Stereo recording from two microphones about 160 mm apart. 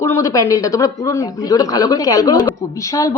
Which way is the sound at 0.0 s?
20° left (ahead or behind).